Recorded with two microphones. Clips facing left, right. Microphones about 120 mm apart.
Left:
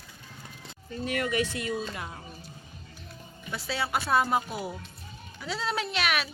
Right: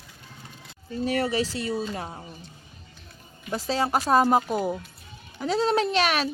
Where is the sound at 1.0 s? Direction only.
35° right (ahead or behind).